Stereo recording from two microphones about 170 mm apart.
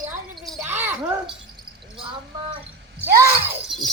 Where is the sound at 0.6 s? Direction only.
15° right (ahead or behind).